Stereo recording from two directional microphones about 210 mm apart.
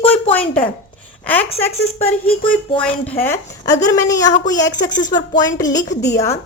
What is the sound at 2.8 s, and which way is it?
A woman's voice, 10° left (ahead or behind).